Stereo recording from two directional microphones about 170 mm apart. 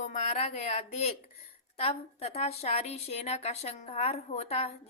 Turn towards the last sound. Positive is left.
turn(degrees=35)  # may be behind; listen again after turning